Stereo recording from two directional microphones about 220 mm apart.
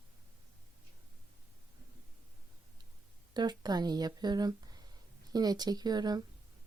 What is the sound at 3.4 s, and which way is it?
Speech, 20° right (ahead or behind).